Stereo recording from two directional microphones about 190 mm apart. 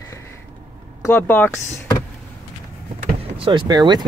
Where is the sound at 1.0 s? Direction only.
10° left (ahead or behind).